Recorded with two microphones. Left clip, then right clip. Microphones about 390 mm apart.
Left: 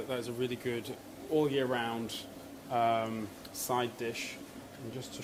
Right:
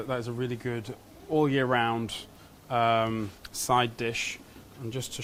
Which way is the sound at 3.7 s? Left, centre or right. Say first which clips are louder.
Right 8 dB; right.